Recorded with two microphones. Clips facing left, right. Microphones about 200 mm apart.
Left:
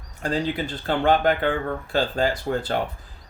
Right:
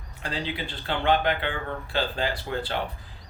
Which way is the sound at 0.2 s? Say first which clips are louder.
Left 7 dB; 45° left (ahead or behind).